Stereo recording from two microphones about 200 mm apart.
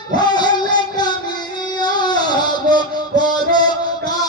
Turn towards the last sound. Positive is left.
turn(degrees=20)  # may be behind; listen again after turning